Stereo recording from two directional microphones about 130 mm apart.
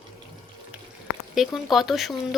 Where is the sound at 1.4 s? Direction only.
Centre (ahead or behind).